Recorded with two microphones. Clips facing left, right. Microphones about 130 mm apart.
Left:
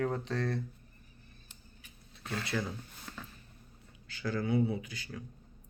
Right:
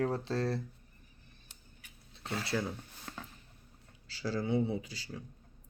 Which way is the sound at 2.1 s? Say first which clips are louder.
Right 1 dB; 25° right (ahead or behind).